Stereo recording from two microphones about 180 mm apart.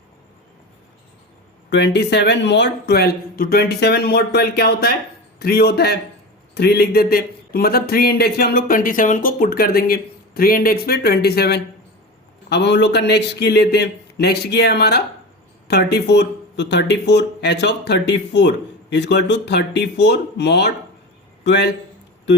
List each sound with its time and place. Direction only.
1.7 s a man's voice: 70° left (ahead or behind)